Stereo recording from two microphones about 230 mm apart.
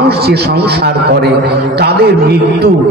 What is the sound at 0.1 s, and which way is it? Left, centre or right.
A man's voice, right.